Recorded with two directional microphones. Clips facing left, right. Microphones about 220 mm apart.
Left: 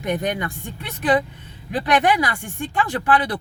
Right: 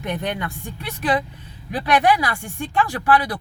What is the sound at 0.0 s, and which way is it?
Speech, 15° left (ahead or behind).